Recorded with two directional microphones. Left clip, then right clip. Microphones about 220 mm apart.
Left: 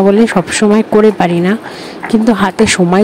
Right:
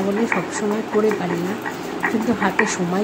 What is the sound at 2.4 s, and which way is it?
Speech, 40° left (ahead or behind).